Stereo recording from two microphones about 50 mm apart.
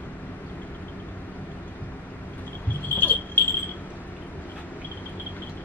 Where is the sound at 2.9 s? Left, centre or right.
Left.